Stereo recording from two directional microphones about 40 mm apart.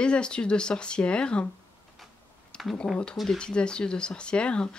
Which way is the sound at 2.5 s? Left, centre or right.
Left.